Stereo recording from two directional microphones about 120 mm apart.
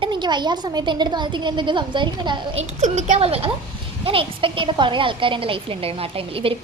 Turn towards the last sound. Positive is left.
turn(degrees=-50)  # may be behind; listen again after turning